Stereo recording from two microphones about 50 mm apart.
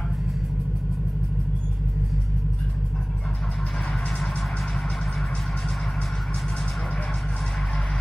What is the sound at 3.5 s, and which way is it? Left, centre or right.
Music, centre.